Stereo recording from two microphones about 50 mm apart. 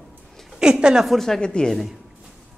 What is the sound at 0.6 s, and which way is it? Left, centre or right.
Speech, centre.